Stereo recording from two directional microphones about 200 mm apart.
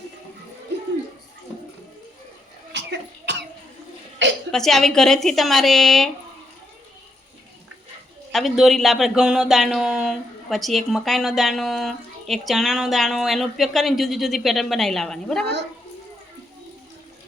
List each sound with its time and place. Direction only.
2.7 s cough: 60° right (ahead or behind)
4.2 s throat clearing: 65° right (ahead or behind)
4.5 s speech: centre (ahead or behind)
8.3 s speech: centre (ahead or behind)